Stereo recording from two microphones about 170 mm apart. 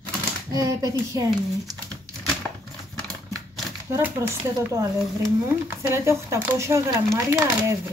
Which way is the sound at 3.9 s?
15° right (ahead or behind).